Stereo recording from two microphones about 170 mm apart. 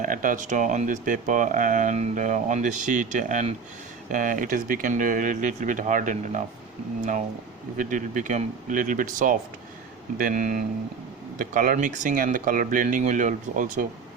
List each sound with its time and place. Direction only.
0.0 s speech: 50° right (ahead or behind)
7.8 s speech: 50° right (ahead or behind)